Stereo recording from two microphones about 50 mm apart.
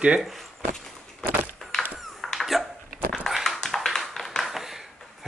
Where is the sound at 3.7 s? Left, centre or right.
Centre.